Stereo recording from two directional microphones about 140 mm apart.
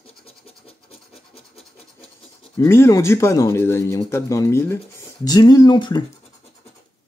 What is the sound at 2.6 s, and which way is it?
Speech, 20° left (ahead or behind).